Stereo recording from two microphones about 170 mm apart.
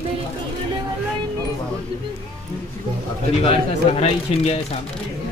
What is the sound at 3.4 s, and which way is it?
Speech, 35° left (ahead or behind).